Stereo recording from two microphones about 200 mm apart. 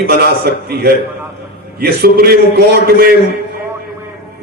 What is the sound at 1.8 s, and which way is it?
A man's voice, 50° right (ahead or behind).